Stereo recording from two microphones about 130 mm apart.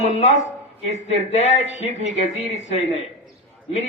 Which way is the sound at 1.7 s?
60° left (ahead or behind).